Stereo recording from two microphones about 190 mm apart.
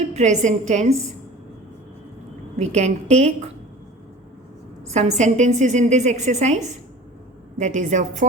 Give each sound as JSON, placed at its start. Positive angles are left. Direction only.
{"t": 0.1, "sound": "a woman's voice", "side_deg": -35}
{"t": 2.6, "sound": "a woman's voice", "side_deg": -35}
{"t": 4.9, "sound": "a woman's voice", "side_deg": -40}